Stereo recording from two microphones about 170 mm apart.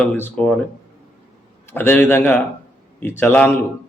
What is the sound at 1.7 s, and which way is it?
A man's voice, 10° left (ahead or behind).